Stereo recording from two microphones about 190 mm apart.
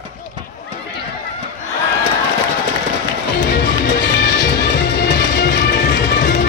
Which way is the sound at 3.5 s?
65° left (ahead or behind).